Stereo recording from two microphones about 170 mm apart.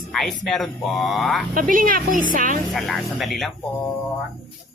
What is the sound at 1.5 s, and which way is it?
A woman's voice, 55° right (ahead or behind).